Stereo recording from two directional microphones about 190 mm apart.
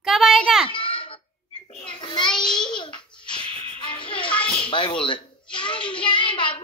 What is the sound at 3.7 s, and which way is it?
Music, 25° left (ahead or behind).